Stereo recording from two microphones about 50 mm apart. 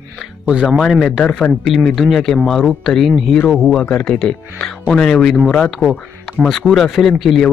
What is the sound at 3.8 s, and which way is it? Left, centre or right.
Speech, left.